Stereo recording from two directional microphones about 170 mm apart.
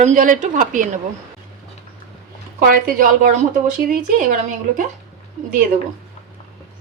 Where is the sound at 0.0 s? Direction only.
50° right (ahead or behind).